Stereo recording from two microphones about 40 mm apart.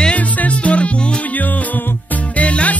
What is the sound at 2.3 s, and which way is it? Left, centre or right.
Music, left.